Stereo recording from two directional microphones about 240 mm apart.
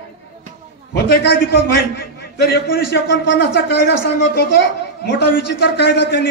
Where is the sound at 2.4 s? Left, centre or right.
Left.